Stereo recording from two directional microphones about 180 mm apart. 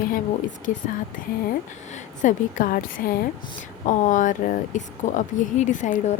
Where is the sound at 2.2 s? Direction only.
45° left (ahead or behind).